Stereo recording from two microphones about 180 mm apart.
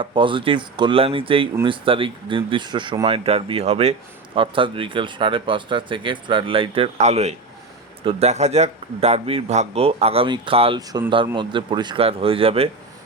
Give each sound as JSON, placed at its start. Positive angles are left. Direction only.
{"t": 0.0, "sound": "speech", "side_deg": -30}